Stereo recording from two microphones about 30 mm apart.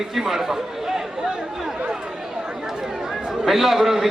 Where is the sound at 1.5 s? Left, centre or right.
Centre.